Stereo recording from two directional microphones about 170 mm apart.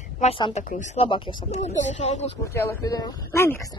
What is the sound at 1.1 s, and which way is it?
Speech, 30° left (ahead or behind).